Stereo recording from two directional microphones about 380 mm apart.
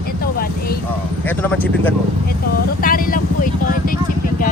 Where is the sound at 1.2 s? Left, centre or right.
Centre.